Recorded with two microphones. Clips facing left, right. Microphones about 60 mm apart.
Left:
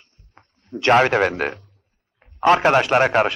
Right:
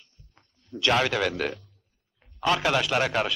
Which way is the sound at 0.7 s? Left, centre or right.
Left.